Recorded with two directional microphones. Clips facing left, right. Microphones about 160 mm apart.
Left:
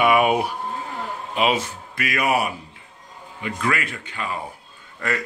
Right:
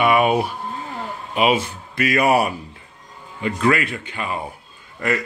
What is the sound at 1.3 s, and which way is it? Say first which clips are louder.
Speech: right 3 dB; 10° right (ahead or behind).